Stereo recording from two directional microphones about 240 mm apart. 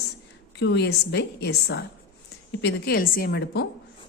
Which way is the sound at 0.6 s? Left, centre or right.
Left.